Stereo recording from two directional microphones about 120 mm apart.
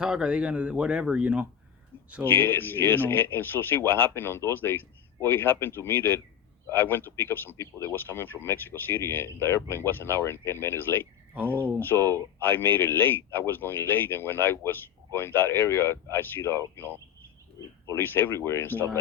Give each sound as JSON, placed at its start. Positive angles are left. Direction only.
{"t": 0.0, "sound": "speech", "side_deg": -5}
{"t": 2.2, "sound": "a man's voice", "side_deg": 20}
{"t": 11.9, "sound": "speech", "side_deg": -30}
{"t": 12.4, "sound": "a man's voice", "side_deg": 15}
{"t": 17.9, "sound": "speech", "side_deg": 20}